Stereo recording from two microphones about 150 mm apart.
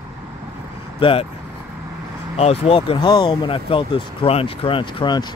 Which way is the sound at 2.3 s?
45° left (ahead or behind).